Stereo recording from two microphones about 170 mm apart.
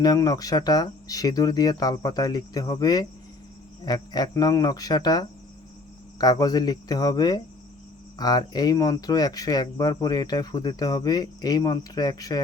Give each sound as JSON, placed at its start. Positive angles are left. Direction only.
{"t": 0.0, "sound": "speech", "side_deg": 20}